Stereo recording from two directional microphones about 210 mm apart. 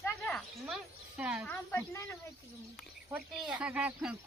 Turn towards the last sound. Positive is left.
turn(degrees=-5)  # may be behind; listen again after turning